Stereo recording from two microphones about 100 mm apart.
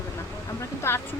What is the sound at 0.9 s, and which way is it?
Speech, 25° left (ahead or behind).